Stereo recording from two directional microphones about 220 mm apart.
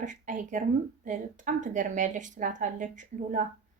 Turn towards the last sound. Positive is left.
turn(degrees=-35)  # may be behind; listen again after turning